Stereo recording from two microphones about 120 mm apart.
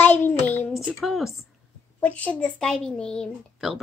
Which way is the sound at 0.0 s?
15° left (ahead or behind).